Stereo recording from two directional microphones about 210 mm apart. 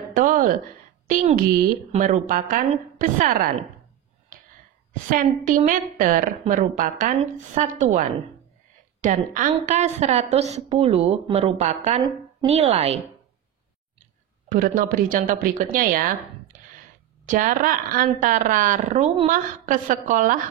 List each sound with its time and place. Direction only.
0.1 s a woman's voice: 40° right (ahead or behind)
5.1 s a woman's voice: 40° right (ahead or behind)
15.0 s speech: 40° right (ahead or behind)
17.3 s speech: 40° right (ahead or behind)